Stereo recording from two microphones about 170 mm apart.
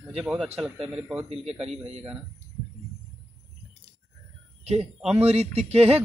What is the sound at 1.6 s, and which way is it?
Speech, 35° right (ahead or behind).